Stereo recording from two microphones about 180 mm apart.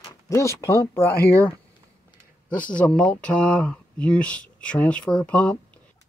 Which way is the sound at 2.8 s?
5° left (ahead or behind).